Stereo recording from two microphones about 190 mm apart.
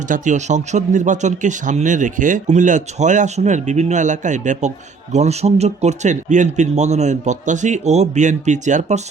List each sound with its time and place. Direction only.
0.1 s speech: 40° right (ahead or behind)